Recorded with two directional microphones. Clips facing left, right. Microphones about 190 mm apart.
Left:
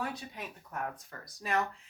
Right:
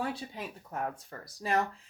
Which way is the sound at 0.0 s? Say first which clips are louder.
Right 3 dB; 30° right (ahead or behind).